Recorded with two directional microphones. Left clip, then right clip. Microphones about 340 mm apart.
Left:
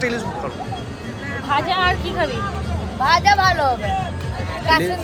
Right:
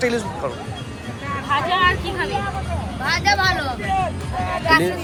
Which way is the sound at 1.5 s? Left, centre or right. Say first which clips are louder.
Even; left.